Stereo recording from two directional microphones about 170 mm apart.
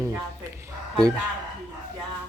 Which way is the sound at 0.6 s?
15° right (ahead or behind).